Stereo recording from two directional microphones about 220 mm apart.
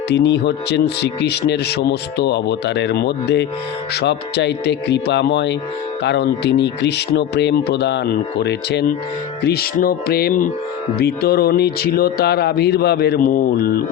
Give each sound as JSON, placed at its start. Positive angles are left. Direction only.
{"t": 0.1, "sound": "speech", "side_deg": 50}